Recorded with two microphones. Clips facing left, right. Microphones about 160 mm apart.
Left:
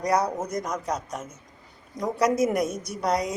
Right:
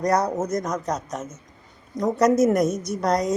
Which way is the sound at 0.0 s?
10° left (ahead or behind).